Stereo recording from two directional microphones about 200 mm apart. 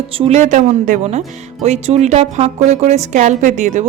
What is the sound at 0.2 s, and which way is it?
Speech, 35° right (ahead or behind).